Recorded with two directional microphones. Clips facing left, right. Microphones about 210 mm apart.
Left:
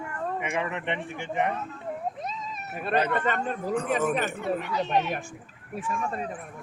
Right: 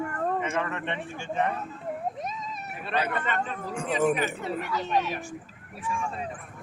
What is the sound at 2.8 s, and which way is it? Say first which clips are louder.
Speech: left 4 dB; 45° left (ahead or behind).